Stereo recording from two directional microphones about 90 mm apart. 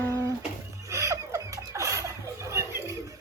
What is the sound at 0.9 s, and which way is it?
Laughter, 35° right (ahead or behind).